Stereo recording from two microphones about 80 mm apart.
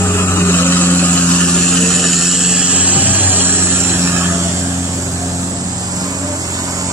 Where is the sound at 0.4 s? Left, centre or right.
Left.